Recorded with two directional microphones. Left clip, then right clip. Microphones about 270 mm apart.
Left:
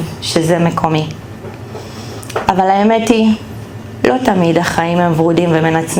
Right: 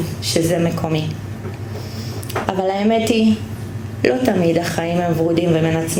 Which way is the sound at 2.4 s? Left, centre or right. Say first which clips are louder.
Left 8 dB; left.